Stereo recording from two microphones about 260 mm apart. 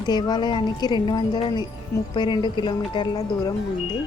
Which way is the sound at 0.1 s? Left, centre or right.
Centre.